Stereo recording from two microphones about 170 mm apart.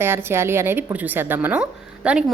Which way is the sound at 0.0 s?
15° right (ahead or behind).